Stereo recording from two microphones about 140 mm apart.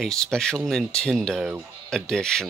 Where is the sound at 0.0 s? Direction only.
5° left (ahead or behind).